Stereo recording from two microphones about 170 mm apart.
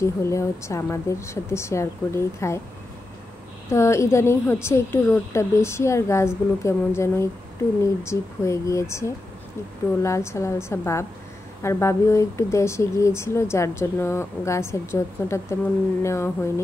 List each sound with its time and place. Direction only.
0.0 s speech: 15° left (ahead or behind)
3.7 s speech: 15° left (ahead or behind)